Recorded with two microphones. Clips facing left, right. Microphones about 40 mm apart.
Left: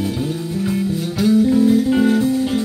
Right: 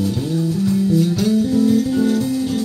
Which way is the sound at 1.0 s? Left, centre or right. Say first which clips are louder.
Left 2 dB; centre.